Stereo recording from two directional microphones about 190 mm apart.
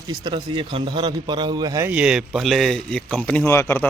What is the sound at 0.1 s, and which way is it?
A man's voice, 25° right (ahead or behind).